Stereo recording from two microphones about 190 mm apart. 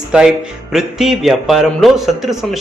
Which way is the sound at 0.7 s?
Centre (ahead or behind).